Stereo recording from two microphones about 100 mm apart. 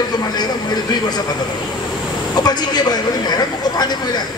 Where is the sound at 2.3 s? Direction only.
45° left (ahead or behind).